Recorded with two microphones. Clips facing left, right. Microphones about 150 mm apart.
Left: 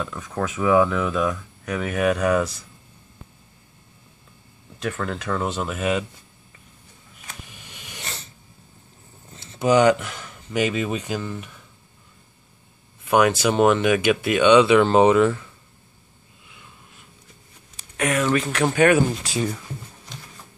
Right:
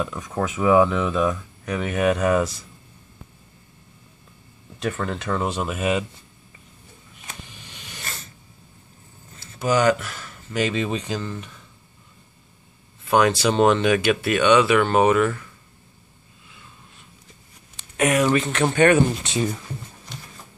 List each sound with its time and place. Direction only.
0.0 s speech: 15° right (ahead or behind)
4.7 s speech: centre (ahead or behind)
7.4 s vehicle: 10° left (ahead or behind)
9.3 s speech: 25° left (ahead or behind); by 11.6 s 5° left (ahead or behind)
13.0 s speech: 10° left (ahead or behind)
17.7 s a sound: 20° right (ahead or behind)
18.3 s speech: centre (ahead or behind)